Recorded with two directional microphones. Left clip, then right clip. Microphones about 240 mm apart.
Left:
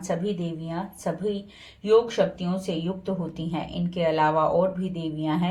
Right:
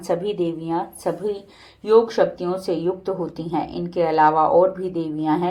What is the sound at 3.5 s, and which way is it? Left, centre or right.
A woman's voice, right.